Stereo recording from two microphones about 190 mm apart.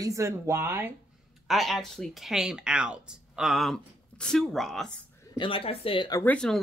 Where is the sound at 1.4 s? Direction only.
Centre (ahead or behind).